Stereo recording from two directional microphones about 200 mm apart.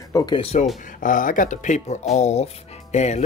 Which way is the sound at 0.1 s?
25° left (ahead or behind).